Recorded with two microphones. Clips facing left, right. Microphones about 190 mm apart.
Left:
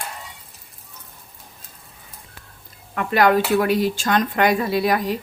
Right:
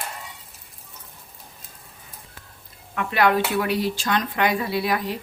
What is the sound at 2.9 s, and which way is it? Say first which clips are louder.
Speech: left 3 dB; 45° left (ahead or behind).